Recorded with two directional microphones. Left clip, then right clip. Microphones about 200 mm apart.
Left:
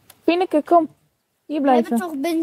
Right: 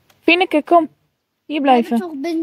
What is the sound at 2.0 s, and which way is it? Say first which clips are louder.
Speech: even; 15° left (ahead or behind).